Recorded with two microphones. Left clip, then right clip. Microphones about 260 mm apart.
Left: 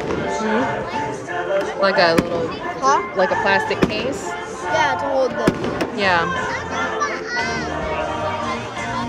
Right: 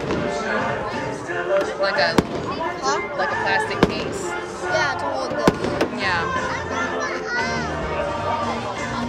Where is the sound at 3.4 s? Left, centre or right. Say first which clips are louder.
Left 2 dB; centre.